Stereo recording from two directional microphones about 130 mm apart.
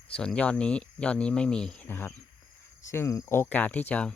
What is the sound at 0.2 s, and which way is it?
Speech, 10° left (ahead or behind).